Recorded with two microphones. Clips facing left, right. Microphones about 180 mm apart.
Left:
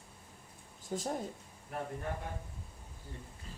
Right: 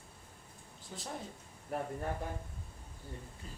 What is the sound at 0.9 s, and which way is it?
Speech, 45° left (ahead or behind).